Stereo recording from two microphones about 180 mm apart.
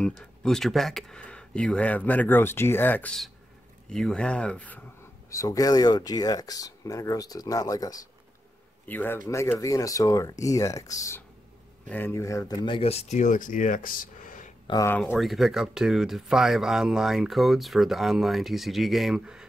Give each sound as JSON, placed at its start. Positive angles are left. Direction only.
{"t": 0.4, "sound": "speech", "side_deg": 0}
{"t": 5.3, "sound": "speech", "side_deg": 20}
{"t": 8.8, "sound": "a man's voice", "side_deg": 10}
{"t": 14.7, "sound": "speech", "side_deg": 15}
{"t": 15.0, "sound": "speech", "side_deg": 5}